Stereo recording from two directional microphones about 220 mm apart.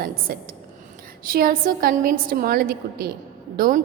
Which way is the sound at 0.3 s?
45° right (ahead or behind).